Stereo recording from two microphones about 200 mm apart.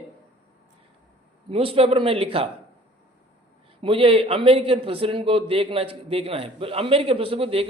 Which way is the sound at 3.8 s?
25° right (ahead or behind).